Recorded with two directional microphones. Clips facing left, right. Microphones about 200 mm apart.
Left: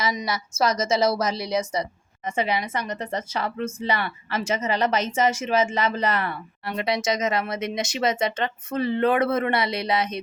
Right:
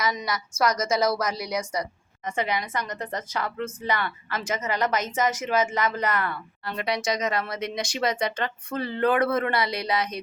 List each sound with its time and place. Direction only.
0.0 s speech: 25° left (ahead or behind)